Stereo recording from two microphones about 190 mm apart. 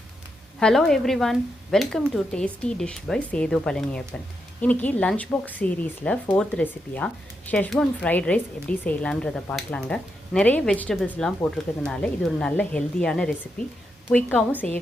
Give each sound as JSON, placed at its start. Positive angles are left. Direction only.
{"t": 0.6, "sound": "speech", "side_deg": 0}